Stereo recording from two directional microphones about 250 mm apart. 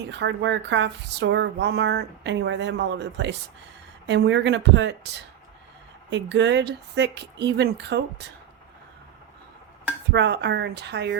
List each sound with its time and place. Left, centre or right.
0.1 s speech: right
6.1 s speech: right
10.1 s speech: right